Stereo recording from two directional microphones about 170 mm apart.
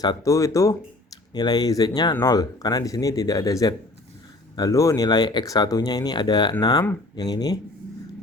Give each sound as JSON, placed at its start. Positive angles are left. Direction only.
{"t": 0.0, "sound": "speech", "side_deg": 20}